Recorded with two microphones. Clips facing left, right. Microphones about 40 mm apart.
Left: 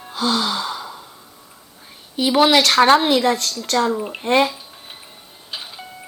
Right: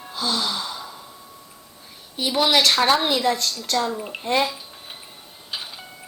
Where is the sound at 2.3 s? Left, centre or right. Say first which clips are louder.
Left 5 dB; left.